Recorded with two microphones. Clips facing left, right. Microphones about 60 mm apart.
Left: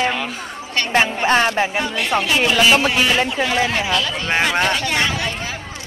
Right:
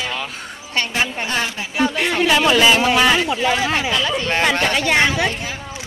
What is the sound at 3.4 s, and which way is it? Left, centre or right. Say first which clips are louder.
Speech: right 1 dB; right.